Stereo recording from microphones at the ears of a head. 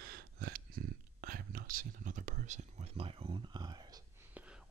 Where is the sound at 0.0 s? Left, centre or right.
Right.